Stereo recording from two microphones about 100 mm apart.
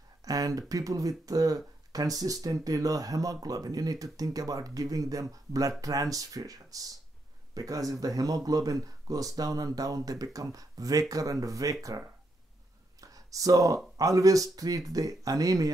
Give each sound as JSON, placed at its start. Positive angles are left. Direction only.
{"t": 0.2, "sound": "speech", "side_deg": -35}
{"t": 13.0, "sound": "a sound", "side_deg": -35}
{"t": 13.9, "sound": "speech", "side_deg": -35}